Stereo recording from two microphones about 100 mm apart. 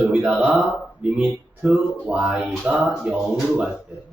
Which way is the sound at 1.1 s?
5° right (ahead or behind).